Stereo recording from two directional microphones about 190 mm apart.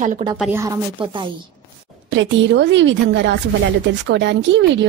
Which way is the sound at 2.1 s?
75° right (ahead or behind).